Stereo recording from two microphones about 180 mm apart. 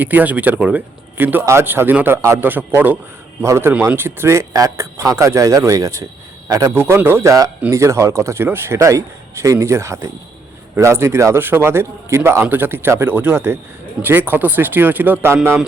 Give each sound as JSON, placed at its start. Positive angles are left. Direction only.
{"t": 0.0, "sound": "a man's voice", "side_deg": -10}